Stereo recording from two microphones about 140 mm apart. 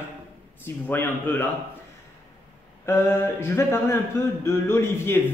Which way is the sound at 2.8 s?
15° left (ahead or behind).